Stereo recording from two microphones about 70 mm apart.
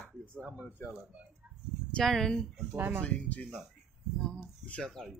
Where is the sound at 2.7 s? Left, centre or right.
Right.